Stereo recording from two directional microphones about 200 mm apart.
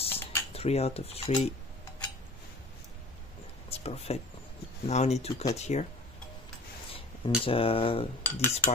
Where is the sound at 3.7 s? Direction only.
30° left (ahead or behind).